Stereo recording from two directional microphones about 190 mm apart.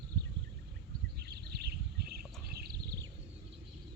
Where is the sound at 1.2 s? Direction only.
60° right (ahead or behind).